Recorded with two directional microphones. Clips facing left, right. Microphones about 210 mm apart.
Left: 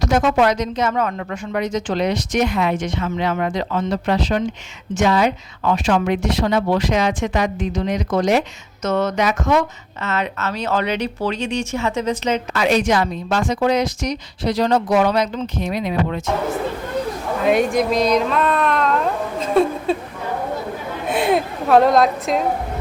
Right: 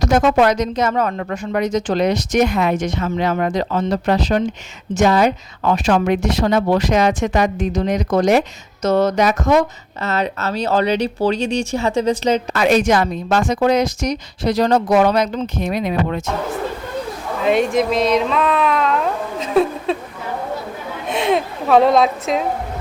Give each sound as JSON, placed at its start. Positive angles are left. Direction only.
{"t": 0.0, "sound": "a woman's voice", "side_deg": -40}
{"t": 12.5, "sound": "a woman's voice", "side_deg": -45}
{"t": 17.4, "sound": "speech", "side_deg": 0}
{"t": 21.1, "sound": "speech", "side_deg": 5}